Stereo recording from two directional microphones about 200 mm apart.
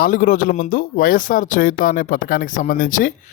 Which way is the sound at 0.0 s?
45° left (ahead or behind).